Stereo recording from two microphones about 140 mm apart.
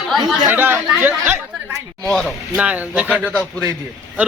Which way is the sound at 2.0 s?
5° left (ahead or behind).